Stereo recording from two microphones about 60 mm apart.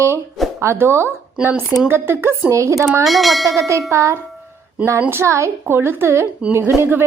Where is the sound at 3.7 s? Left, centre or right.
Right.